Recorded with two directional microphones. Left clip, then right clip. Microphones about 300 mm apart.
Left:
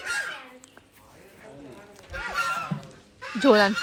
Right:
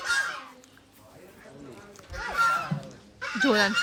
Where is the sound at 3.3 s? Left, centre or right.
Centre.